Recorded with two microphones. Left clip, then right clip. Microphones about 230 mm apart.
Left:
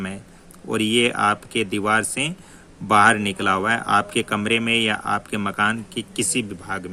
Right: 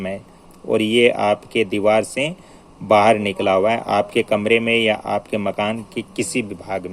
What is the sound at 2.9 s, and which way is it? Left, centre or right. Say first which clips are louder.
Speech: right 2 dB; left.